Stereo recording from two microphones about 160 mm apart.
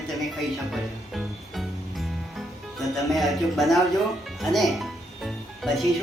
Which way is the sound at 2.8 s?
Centre (ahead or behind).